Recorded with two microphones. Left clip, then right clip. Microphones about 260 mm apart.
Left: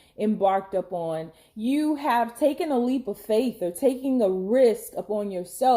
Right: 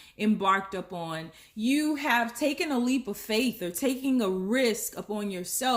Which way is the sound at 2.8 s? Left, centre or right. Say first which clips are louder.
Left 3 dB; right.